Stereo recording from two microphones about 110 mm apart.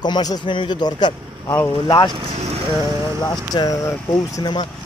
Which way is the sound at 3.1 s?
40° left (ahead or behind).